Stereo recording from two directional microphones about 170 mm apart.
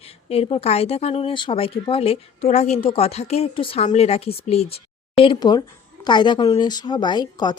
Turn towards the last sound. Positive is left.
turn(degrees=25)  # may be behind; listen again after turning